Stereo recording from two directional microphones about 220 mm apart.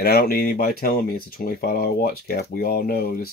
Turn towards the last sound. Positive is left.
turn(degrees=45)  # may be behind; listen again after turning